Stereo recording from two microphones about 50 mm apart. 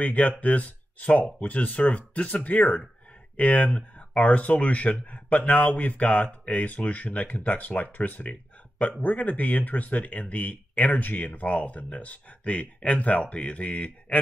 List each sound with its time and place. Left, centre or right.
0.0 s speech: left